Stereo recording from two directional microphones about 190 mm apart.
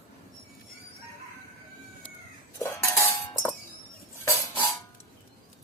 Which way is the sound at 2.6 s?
15° left (ahead or behind).